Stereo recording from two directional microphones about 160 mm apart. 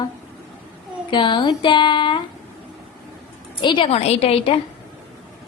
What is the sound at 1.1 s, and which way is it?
Speech, 30° left (ahead or behind).